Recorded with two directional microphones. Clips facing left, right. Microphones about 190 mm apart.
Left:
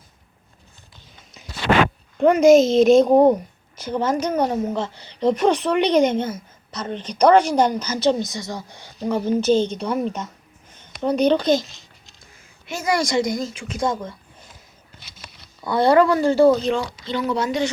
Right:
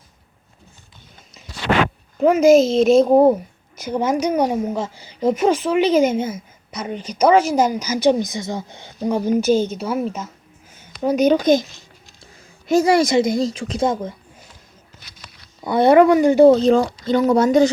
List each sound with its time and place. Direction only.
2.1 s a woman's voice: centre (ahead or behind)
12.2 s a sound: 35° right (ahead or behind)
12.9 s a woman's voice: 20° right (ahead or behind)
13.8 s a woman's voice: 20° right (ahead or behind)
15.6 s a woman's voice: 20° right (ahead or behind)
16.5 s speech: 35° right (ahead or behind)